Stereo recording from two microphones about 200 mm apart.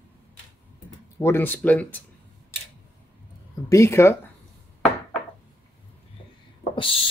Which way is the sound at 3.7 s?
15° left (ahead or behind).